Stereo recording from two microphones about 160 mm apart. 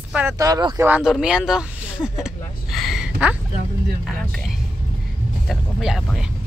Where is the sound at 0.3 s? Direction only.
25° right (ahead or behind).